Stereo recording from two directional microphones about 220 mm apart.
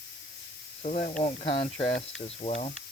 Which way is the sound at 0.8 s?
35° left (ahead or behind).